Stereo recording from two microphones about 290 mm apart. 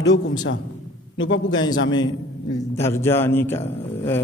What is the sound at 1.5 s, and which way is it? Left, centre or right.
A man's voice, centre.